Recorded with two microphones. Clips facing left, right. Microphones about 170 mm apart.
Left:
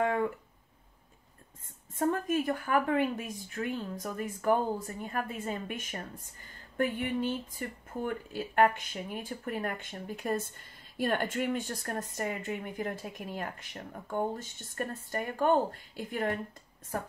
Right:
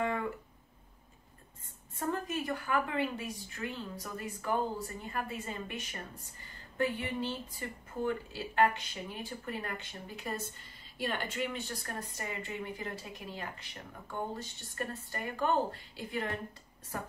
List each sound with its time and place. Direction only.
2.0 s speech: 50° left (ahead or behind)